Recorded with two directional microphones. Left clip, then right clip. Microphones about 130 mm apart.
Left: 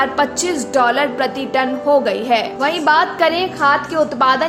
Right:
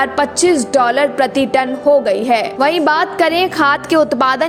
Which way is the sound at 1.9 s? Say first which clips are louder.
Right 2 dB; 40° right (ahead or behind).